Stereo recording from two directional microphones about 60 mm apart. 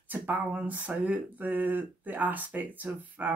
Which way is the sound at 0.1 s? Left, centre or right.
Right.